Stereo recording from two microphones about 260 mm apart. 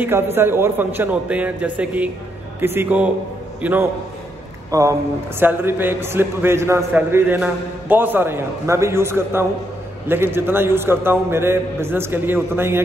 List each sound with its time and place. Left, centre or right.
0.0 s a man's voice: centre